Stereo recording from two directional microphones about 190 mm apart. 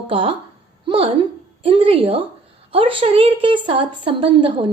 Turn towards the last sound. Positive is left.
turn(degrees=-25)  # may be behind; listen again after turning